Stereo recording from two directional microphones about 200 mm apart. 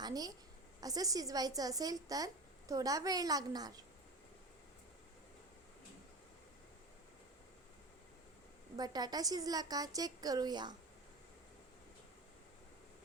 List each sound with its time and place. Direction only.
0.0 s a woman's voice: 20° right (ahead or behind)
8.8 s a woman's voice: 20° right (ahead or behind)